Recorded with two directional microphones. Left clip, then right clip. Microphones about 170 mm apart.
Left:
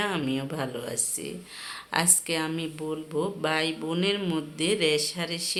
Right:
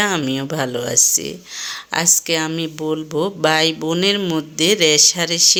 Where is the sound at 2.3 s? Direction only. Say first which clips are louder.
Right 9 dB; 35° right (ahead or behind).